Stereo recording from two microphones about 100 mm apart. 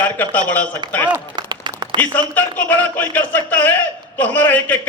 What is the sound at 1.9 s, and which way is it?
A man's voice, 15° left (ahead or behind).